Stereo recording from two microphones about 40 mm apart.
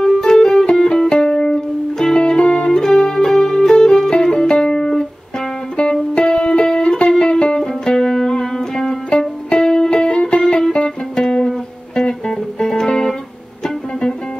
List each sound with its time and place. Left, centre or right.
0.0 s music: centre
2.7 s music: centre
6.1 s music: left